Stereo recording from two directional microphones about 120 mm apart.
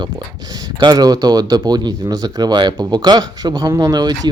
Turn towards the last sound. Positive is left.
turn(degrees=-35)  # may be behind; listen again after turning